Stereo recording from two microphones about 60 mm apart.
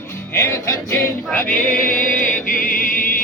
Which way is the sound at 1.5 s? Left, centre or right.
Left.